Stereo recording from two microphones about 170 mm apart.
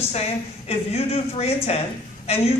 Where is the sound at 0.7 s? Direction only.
35° left (ahead or behind).